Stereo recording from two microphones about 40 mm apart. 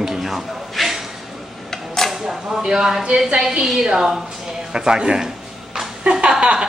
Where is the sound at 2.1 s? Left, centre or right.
Centre.